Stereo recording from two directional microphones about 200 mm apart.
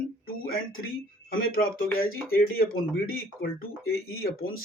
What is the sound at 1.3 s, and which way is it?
Speech, 45° left (ahead or behind).